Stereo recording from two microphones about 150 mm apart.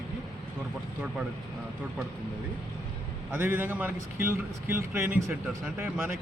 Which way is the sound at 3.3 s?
10° right (ahead or behind).